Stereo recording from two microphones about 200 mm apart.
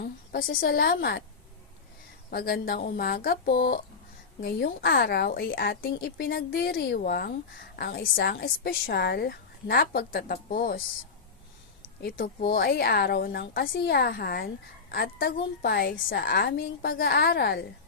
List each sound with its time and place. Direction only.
0.0 s a woman's voice: 50° left (ahead or behind)
2.3 s a woman's voice: 50° left (ahead or behind)
12.0 s a woman's voice: 50° left (ahead or behind)